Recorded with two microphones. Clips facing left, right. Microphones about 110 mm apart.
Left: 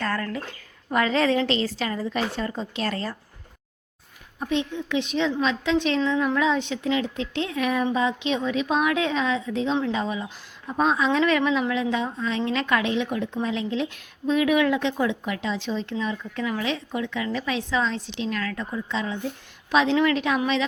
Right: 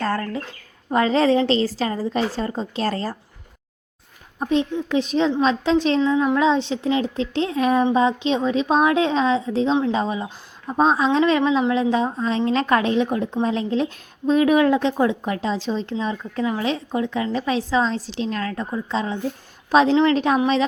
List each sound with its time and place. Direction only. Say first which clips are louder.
0.0 s speech: right 4 dB; 30° right (ahead or behind)
4.4 s speech: right 5 dB; 35° right (ahead or behind)